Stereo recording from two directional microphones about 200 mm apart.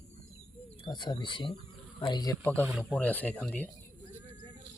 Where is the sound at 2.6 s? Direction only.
5° right (ahead or behind).